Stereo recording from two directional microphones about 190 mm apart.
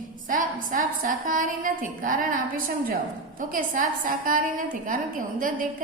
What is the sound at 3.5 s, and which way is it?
A woman's voice, 45° right (ahead or behind).